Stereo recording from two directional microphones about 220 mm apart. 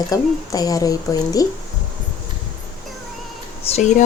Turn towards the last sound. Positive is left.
turn(degrees=30)  # may be behind; listen again after turning